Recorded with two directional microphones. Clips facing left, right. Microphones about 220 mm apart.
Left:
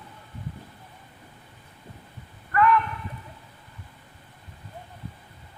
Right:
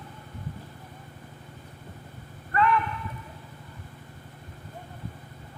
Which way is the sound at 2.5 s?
25° right (ahead or behind).